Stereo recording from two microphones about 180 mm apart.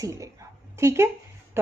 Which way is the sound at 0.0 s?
20° right (ahead or behind).